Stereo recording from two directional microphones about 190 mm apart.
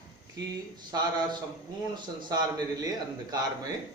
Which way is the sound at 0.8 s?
25° right (ahead or behind).